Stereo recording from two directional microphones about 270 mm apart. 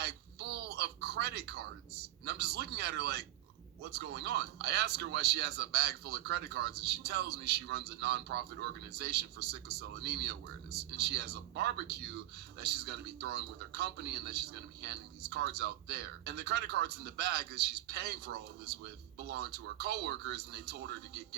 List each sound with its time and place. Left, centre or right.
0.0 s a sound: right
2.2 s speech: right
19.3 s speech: right